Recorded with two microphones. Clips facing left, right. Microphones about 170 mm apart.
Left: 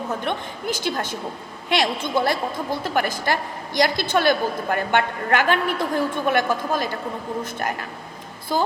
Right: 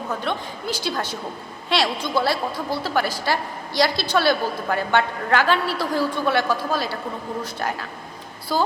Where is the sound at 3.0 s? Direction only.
50° left (ahead or behind).